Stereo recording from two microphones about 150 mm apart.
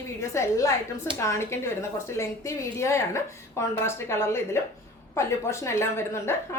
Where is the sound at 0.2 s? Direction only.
20° left (ahead or behind).